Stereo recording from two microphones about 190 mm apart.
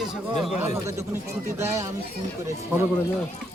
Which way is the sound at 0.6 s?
15° right (ahead or behind).